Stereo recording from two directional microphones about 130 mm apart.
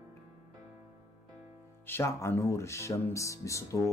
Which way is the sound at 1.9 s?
20° left (ahead or behind).